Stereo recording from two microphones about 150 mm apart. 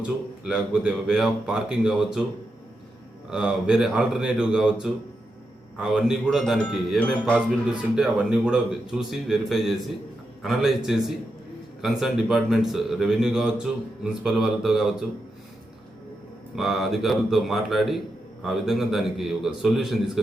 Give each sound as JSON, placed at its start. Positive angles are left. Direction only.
{"t": 0.0, "sound": "speech", "side_deg": -5}
{"t": 3.2, "sound": "speech", "side_deg": -5}
{"t": 7.0, "sound": "a man's voice", "side_deg": 10}
{"t": 7.3, "sound": "speech", "side_deg": -5}
{"t": 16.6, "sound": "speech", "side_deg": 0}